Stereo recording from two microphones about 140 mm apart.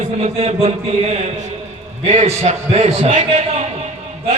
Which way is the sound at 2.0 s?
50° right (ahead or behind).